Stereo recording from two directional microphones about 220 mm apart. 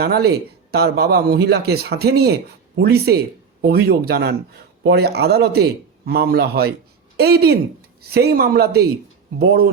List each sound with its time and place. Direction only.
0.0 s speech: 45° right (ahead or behind)